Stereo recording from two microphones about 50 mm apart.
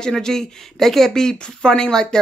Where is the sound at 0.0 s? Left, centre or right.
Centre.